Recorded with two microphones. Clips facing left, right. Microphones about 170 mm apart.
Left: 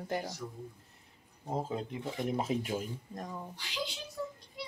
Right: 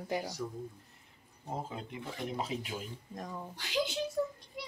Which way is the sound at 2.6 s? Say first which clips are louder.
Left 6 dB; 45° left (ahead or behind).